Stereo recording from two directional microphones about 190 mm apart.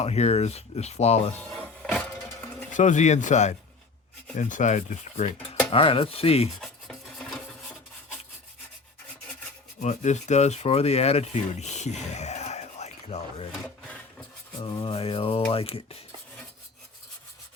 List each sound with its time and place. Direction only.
0.0 s speech: 35° left (ahead or behind)
1.4 s music: 5° left (ahead or behind)
2.7 s speech: 40° left (ahead or behind)
5.7 s mantra: 30° left (ahead or behind)
6.6 s filing: centre (ahead or behind)
9.8 s speech: 40° left (ahead or behind)
13.5 s wood: 5° left (ahead or behind)
14.6 s mantra: 25° left (ahead or behind)